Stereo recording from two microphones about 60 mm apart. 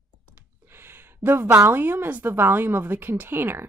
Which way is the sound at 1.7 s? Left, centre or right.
Right.